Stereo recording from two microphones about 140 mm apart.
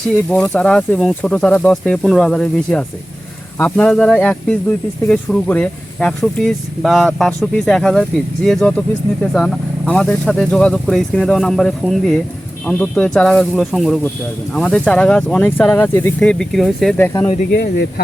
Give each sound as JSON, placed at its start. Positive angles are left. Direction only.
{"t": 0.1, "sound": "speech", "side_deg": 5}